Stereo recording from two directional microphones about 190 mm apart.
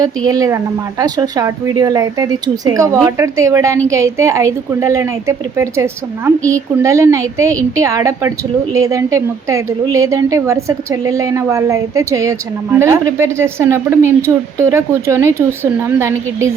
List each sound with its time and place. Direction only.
0.3 s a woman's voice: 15° right (ahead or behind)